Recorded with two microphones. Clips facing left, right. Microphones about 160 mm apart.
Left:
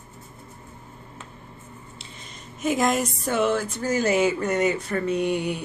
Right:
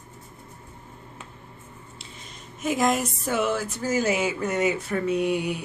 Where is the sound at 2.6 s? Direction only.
Centre (ahead or behind).